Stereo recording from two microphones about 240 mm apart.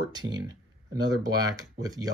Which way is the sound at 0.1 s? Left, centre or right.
Centre.